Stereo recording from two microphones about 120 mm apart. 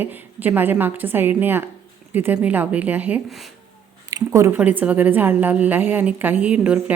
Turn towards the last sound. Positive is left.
turn(degrees=-10)  # may be behind; listen again after turning